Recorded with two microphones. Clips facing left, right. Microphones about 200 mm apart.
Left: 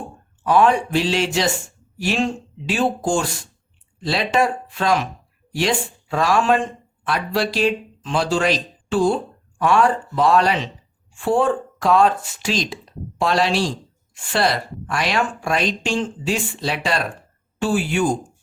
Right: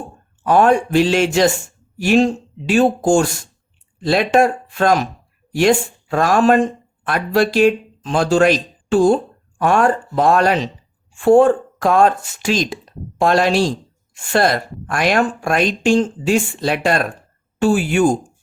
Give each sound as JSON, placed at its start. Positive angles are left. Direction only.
{"t": 0.4, "sound": "speech", "side_deg": -45}